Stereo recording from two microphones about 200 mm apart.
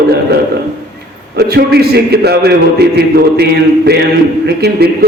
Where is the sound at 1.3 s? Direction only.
55° right (ahead or behind).